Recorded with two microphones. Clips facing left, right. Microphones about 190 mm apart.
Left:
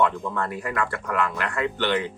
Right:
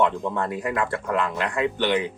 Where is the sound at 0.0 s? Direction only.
25° right (ahead or behind).